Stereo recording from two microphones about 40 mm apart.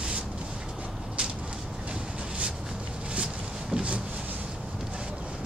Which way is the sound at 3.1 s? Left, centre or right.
Right.